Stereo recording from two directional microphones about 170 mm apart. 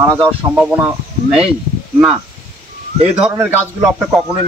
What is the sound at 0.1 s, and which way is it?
Speech, 10° right (ahead or behind).